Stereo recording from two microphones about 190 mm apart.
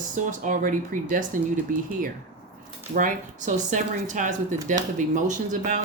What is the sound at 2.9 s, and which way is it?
Speech, 45° right (ahead or behind).